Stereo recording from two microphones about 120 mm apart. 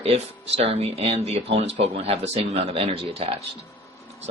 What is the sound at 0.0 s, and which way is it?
Speech, 60° right (ahead or behind).